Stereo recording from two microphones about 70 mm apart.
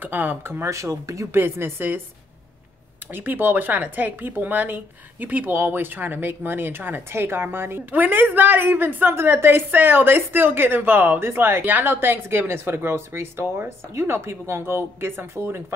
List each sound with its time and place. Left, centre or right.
0.0 s speech: right
1.3 s speech: right
3.1 s speech: right